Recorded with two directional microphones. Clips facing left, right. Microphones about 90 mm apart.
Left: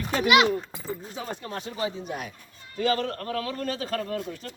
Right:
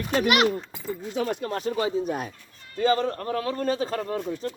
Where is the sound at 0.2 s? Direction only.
45° right (ahead or behind).